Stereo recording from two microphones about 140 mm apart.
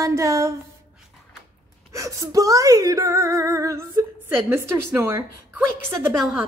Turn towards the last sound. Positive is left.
turn(degrees=-5)  # may be behind; listen again after turning